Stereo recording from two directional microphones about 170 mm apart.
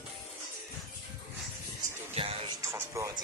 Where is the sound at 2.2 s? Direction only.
35° right (ahead or behind).